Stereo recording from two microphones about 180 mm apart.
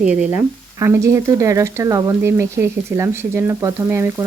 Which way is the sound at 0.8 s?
15° right (ahead or behind).